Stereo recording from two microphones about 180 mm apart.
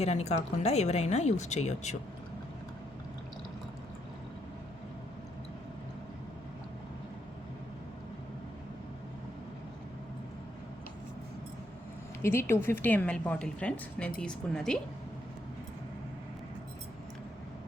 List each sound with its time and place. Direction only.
0.0 s speech: 40° left (ahead or behind)
12.2 s a woman's voice: 15° left (ahead or behind)